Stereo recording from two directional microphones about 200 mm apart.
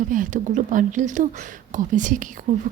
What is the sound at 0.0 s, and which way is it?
Speech, 40° right (ahead or behind).